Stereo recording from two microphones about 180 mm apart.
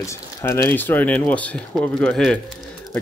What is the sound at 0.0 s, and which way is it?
Speech, 15° left (ahead or behind).